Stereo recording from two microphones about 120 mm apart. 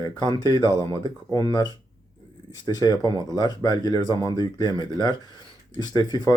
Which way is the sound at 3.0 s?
35° left (ahead or behind).